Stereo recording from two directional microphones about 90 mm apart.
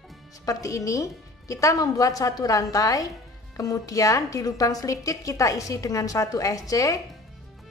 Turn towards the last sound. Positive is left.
turn(degrees=40)  # may be behind; listen again after turning